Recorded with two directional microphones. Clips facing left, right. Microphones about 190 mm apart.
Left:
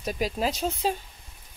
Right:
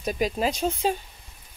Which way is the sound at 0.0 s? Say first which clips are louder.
Right 2 dB; centre (ahead or behind).